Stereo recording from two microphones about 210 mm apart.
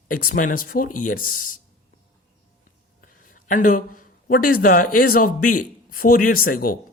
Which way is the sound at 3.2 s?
40° left (ahead or behind).